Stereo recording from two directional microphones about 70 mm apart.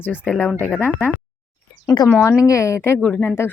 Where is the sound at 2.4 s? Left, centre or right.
Left.